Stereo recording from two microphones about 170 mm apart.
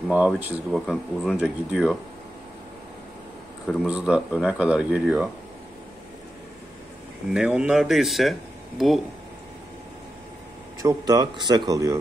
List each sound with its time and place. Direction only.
0.1 s speech: 10° right (ahead or behind)
3.6 s speech: 5° right (ahead or behind)
7.3 s speech: 10° right (ahead or behind)
10.8 s speech: 20° right (ahead or behind)